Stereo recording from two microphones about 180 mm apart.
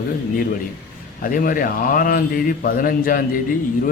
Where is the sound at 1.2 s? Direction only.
50° left (ahead or behind).